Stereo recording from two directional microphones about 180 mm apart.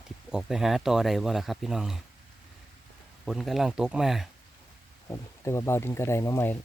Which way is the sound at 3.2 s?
Centre (ahead or behind).